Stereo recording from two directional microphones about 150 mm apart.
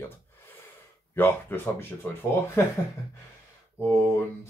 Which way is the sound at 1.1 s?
15° left (ahead or behind).